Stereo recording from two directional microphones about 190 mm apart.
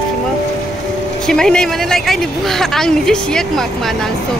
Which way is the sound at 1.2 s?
5° left (ahead or behind).